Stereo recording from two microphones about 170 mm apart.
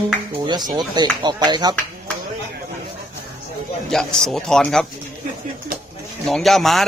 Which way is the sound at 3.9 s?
Centre (ahead or behind).